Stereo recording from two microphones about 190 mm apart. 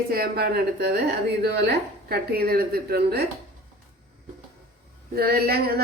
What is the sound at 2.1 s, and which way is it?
Speech, 55° right (ahead or behind).